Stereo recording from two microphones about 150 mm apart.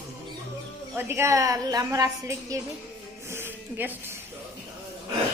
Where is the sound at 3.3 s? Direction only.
15° right (ahead or behind).